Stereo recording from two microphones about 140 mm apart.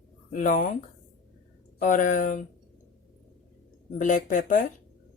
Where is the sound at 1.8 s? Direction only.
65° left (ahead or behind).